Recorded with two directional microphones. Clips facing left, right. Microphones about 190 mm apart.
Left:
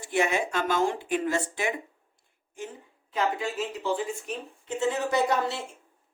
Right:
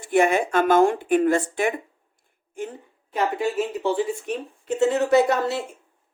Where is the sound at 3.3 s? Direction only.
65° right (ahead or behind).